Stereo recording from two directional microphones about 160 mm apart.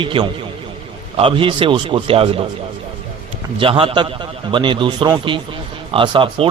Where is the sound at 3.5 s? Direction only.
35° right (ahead or behind).